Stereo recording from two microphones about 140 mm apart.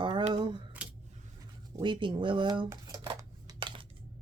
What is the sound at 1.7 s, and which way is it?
Speech, 35° right (ahead or behind).